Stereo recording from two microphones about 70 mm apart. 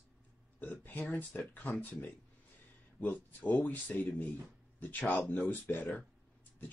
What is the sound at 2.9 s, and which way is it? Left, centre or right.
Speech, left.